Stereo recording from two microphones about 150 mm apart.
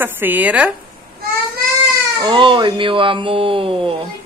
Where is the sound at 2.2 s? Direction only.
35° right (ahead or behind).